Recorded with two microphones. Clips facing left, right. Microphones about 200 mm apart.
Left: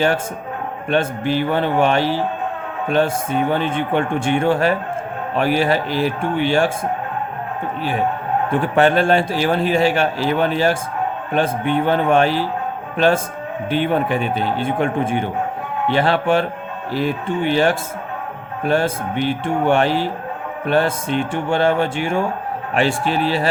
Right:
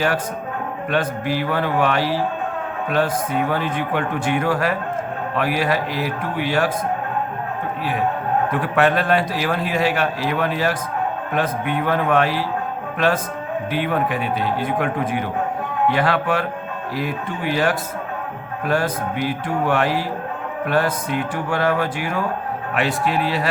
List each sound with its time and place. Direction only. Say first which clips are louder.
0.9 s a man's voice: left 3 dB; 25° left (ahead or behind)
8.4 s a man's voice: left 4 dB; 30° left (ahead or behind)
13.7 s a man's voice: left 4 dB; 25° left (ahead or behind)